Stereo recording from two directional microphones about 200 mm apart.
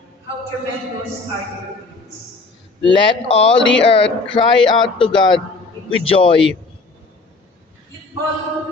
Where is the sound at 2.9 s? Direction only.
30° left (ahead or behind).